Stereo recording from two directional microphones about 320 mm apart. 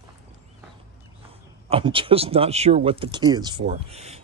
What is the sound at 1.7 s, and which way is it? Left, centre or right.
Speech, centre.